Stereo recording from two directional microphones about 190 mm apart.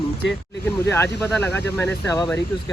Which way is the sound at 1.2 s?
10° left (ahead or behind).